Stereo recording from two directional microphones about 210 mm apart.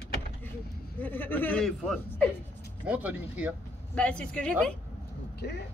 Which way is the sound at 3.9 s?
5° left (ahead or behind).